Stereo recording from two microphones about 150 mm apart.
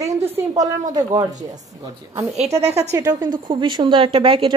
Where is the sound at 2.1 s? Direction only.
45° right (ahead or behind).